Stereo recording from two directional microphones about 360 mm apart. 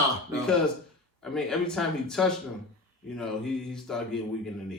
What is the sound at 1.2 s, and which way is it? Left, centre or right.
Speech, centre.